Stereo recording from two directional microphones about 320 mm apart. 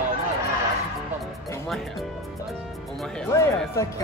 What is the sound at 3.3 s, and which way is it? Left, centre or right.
Speech, centre.